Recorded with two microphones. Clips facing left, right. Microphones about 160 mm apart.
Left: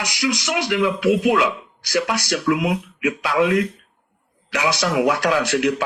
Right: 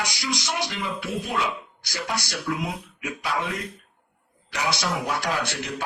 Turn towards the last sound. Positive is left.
turn(degrees=90)